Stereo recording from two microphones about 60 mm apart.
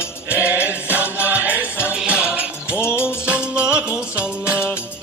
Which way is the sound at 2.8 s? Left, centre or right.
Left.